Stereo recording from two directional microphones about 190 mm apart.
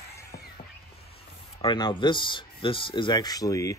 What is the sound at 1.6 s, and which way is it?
Speech, 25° left (ahead or behind).